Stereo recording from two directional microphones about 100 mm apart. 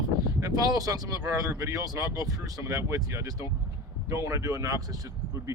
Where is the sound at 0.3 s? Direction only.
35° right (ahead or behind).